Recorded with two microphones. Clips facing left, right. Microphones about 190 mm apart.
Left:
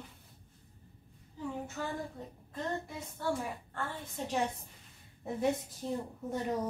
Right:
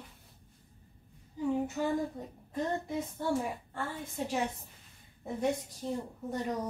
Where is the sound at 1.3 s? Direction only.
15° right (ahead or behind).